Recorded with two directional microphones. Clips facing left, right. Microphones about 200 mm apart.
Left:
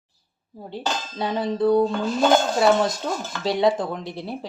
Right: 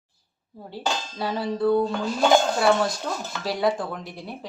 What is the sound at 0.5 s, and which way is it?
Speech, 15° left (ahead or behind).